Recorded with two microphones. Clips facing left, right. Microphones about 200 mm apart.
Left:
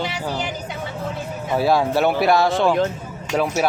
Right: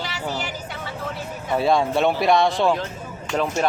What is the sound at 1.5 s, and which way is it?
Speech, 5° left (ahead or behind).